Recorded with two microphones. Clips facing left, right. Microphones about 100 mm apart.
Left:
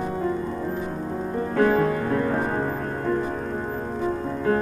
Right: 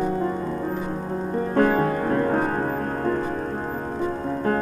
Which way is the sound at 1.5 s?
45° right (ahead or behind).